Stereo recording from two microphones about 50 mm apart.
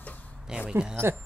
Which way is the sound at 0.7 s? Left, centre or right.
Centre.